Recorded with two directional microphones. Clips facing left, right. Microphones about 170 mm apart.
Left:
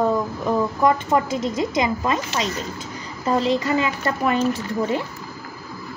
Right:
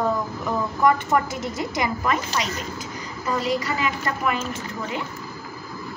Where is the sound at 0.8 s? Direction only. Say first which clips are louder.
Even; 20° left (ahead or behind).